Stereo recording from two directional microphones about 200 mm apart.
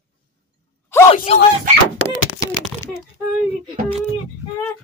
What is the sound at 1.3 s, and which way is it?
Speech, 30° left (ahead or behind).